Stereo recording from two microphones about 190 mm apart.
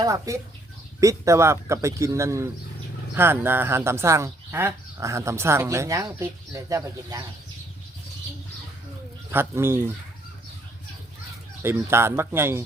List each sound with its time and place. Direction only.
0.0 s speech: 15° right (ahead or behind)
9.3 s speech: 10° right (ahead or behind)
11.6 s speech: 15° right (ahead or behind)